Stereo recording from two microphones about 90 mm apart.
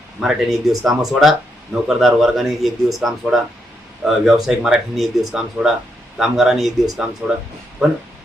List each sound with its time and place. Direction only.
0.2 s speech: 5° right (ahead or behind)
7.2 s speech: 15° right (ahead or behind)